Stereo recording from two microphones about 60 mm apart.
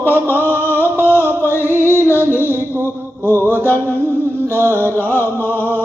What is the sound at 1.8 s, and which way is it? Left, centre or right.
Music, left.